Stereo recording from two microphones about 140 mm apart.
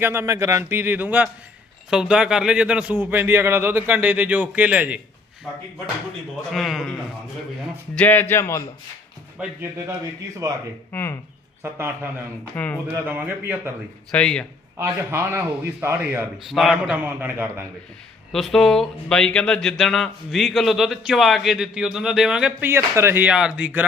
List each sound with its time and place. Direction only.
0.0 s a man's voice: 20° right (ahead or behind)
6.5 s speech: centre (ahead or behind)
7.9 s speech: 15° left (ahead or behind)
10.4 s speech: 25° right (ahead or behind)
10.9 s speech: 20° left (ahead or behind)
11.6 s a man's voice: 15° right (ahead or behind)
12.5 s speech: 10° left (ahead or behind)
12.9 s a man's voice: 15° right (ahead or behind)
14.1 s speech: 5° left (ahead or behind)
14.8 s a man's voice: 20° right (ahead or behind)
16.5 s a man's voice: centre (ahead or behind)
18.3 s speech: centre (ahead or behind)